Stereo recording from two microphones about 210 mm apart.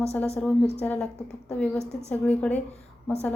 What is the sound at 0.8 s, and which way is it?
A woman's voice, 5° left (ahead or behind).